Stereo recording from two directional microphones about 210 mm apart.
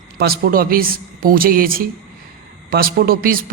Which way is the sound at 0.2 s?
45° right (ahead or behind).